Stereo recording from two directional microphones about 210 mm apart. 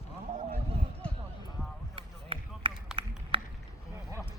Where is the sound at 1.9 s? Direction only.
25° right (ahead or behind).